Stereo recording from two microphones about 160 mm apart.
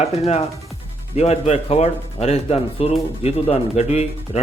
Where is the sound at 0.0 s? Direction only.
40° left (ahead or behind).